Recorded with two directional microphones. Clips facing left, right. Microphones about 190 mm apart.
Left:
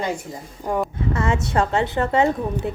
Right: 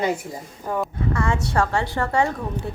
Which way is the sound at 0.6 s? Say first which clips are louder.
Left 2 dB; 15° left (ahead or behind).